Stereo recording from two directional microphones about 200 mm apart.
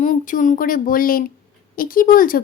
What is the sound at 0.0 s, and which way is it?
A woman's voice, 40° left (ahead or behind).